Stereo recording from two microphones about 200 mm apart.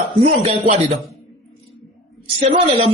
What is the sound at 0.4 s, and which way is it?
Speech, 30° right (ahead or behind).